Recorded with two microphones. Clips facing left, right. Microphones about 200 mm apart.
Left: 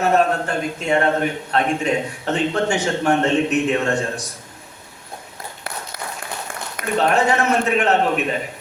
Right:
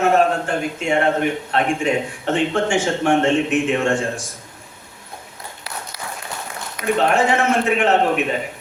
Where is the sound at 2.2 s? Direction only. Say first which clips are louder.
Right 2 dB; 40° left (ahead or behind).